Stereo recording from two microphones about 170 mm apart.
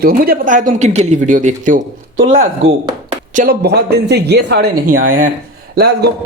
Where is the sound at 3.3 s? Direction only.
55° right (ahead or behind).